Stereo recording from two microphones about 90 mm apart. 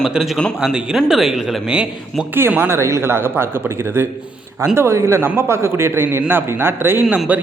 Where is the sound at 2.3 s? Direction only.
25° right (ahead or behind).